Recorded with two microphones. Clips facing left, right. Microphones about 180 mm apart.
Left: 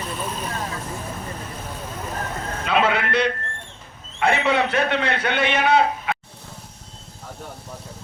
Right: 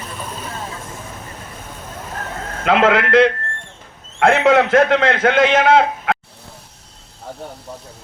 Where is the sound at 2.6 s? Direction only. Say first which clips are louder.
Right 6 dB; 90° right.